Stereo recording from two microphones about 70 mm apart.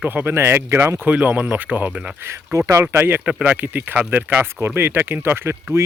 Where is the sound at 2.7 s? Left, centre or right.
Right.